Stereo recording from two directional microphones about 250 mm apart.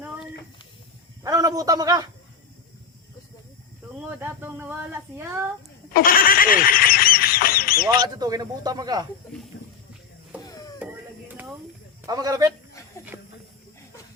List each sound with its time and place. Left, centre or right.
1.2 s a man's voice: centre
4.2 s a man's voice: centre
5.9 s goose: left
7.9 s a man's voice: centre
10.4 s a sound: centre
11.3 s a sound: centre
12.0 s a man's voice: centre
13.1 s snake: centre